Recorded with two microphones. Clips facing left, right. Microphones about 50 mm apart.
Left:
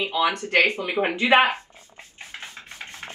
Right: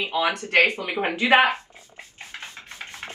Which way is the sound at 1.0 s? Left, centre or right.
Left.